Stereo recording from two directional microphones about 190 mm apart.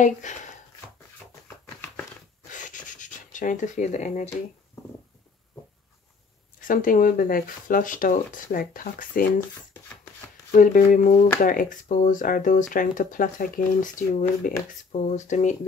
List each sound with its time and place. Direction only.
0.0 s speech: 40° left (ahead or behind)
2.5 s writing: 40° left (ahead or behind)
6.7 s speech: 45° left (ahead or behind)
10.5 s speech: 45° left (ahead or behind)